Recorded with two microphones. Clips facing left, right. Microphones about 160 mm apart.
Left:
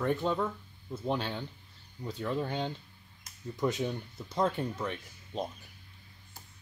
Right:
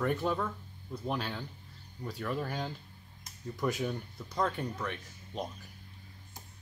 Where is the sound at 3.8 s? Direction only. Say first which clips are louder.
Left 1 dB; 20° left (ahead or behind).